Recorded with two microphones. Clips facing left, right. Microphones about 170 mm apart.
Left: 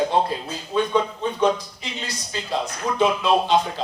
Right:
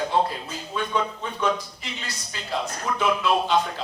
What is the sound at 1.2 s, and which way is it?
Speech, 20° left (ahead or behind).